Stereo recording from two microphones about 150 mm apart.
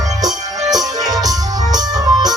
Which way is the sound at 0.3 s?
Centre (ahead or behind).